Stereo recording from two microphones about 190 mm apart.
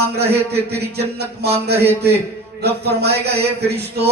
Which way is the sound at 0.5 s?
60° right (ahead or behind).